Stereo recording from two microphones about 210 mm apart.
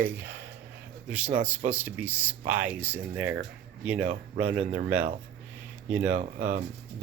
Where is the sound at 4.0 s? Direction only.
35° right (ahead or behind).